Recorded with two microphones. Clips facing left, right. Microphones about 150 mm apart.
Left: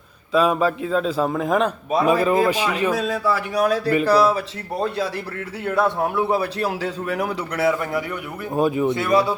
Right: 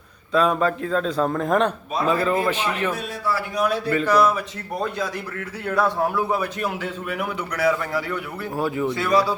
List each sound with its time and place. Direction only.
0.3 s a man's voice: 10° left (ahead or behind)
2.0 s a man's voice: 15° left (ahead or behind)
2.9 s speech: 90° left
3.6 s a man's voice: 40° left (ahead or behind); by 9.3 s 20° left (ahead or behind)